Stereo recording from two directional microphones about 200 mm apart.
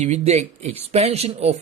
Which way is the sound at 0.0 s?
35° right (ahead or behind).